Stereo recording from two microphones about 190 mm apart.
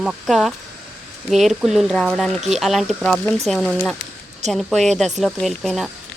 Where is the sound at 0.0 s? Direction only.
Centre (ahead or behind).